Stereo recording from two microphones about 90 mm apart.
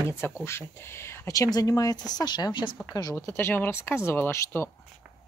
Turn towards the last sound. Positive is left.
turn(degrees=30)  # may be behind; listen again after turning